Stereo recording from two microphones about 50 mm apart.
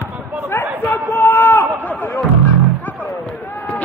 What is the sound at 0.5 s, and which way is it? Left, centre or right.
Chatter, left.